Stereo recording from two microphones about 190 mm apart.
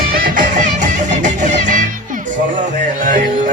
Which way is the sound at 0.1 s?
50° right (ahead or behind).